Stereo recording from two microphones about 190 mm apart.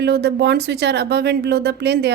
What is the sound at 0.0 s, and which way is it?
Speech, 60° right (ahead or behind).